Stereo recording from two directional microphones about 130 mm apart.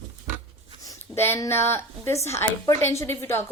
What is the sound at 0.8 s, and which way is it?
A woman's voice, 20° left (ahead or behind).